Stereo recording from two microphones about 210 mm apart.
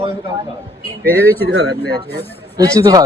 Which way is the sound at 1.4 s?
55° right (ahead or behind).